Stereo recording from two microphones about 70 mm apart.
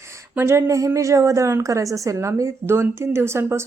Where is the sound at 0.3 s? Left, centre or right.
Right.